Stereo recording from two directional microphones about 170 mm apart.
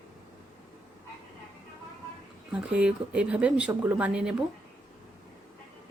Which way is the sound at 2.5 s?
5° right (ahead or behind).